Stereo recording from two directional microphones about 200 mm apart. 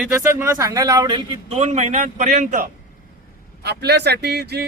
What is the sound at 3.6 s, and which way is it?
Speech, 55° right (ahead or behind).